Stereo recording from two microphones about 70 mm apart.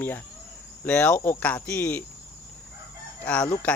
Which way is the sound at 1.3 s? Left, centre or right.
Left.